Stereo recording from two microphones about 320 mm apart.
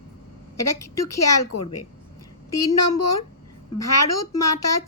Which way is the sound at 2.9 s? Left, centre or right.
Left.